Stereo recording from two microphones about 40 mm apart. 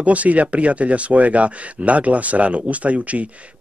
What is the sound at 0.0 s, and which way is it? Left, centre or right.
Speech, right.